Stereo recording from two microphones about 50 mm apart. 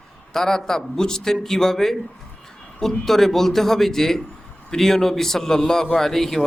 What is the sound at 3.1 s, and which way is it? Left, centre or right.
A man's voice, centre.